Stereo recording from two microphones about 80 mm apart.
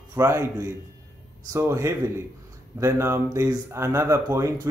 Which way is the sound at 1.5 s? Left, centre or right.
Right.